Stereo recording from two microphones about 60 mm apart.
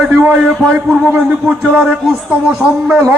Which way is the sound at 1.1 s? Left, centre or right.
Right.